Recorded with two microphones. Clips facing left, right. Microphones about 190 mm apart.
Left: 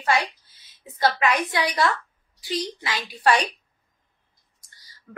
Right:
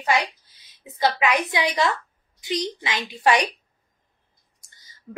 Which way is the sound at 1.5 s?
20° right (ahead or behind).